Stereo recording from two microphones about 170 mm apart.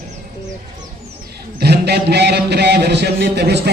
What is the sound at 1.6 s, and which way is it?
A man's voice, 70° right (ahead or behind).